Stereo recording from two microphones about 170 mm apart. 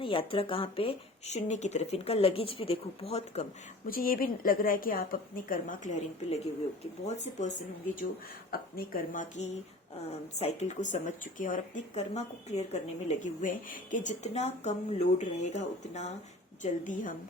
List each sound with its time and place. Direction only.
0.0 s speech: 30° left (ahead or behind)
3.8 s a woman's voice: 55° left (ahead or behind)
7.0 s speech: 40° left (ahead or behind)
8.4 s a woman's voice: 60° left (ahead or behind)